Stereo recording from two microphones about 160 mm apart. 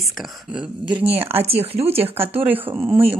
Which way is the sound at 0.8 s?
35° right (ahead or behind).